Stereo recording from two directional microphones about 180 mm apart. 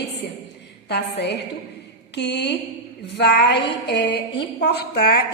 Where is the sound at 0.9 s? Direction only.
70° left (ahead or behind).